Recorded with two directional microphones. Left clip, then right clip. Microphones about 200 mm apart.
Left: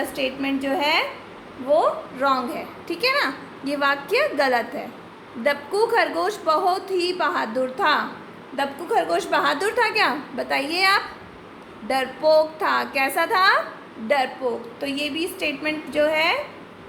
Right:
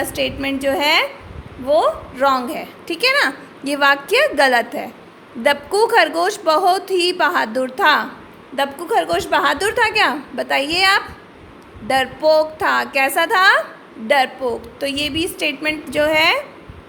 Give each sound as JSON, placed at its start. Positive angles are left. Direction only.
{"t": 0.0, "sound": "a woman's voice", "side_deg": -50}